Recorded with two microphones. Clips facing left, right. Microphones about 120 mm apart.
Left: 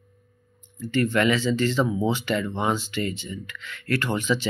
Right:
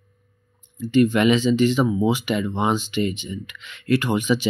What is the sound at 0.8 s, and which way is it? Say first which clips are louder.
Speech: right 5 dB; 15° right (ahead or behind).